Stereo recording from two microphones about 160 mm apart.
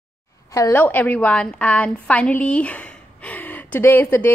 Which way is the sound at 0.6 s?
15° left (ahead or behind).